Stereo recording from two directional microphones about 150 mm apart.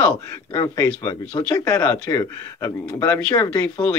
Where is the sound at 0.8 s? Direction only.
10° left (ahead or behind).